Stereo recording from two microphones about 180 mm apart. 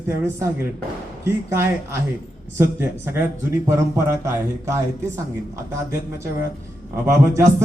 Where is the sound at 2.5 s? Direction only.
10° right (ahead or behind).